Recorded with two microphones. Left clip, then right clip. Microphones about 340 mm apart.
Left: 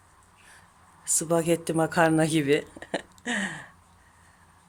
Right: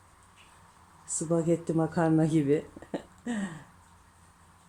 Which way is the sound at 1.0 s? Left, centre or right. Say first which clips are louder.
Left 4 dB; left.